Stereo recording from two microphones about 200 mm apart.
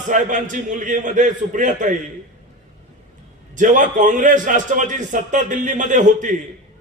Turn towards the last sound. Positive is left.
turn(degrees=-40)  # may be behind; listen again after turning